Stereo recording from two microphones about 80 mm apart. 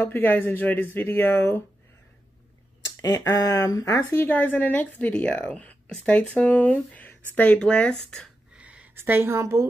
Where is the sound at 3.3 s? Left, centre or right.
Left.